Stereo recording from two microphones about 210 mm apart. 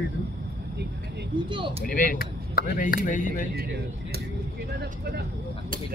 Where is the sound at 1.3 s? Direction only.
25° right (ahead or behind).